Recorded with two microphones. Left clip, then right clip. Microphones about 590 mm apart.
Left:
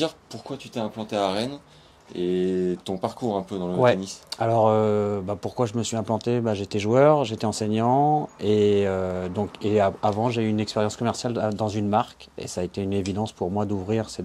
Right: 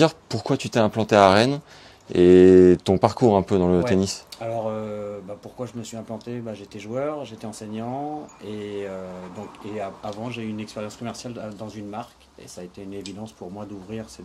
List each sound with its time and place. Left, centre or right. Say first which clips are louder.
0.5 s speech: right 10 dB; right
4.4 s speech: left 9 dB; left